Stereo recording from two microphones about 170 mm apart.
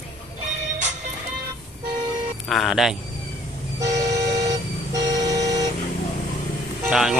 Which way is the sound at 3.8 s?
20° right (ahead or behind).